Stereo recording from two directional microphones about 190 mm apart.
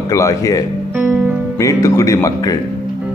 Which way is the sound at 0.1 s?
15° left (ahead or behind).